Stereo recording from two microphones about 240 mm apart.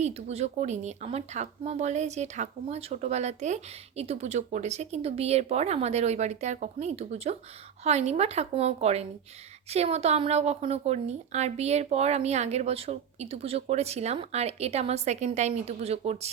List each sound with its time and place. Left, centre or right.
0.0 s speech: right